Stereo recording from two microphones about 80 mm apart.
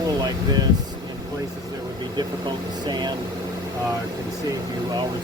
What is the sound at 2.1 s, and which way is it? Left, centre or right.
Speech, right.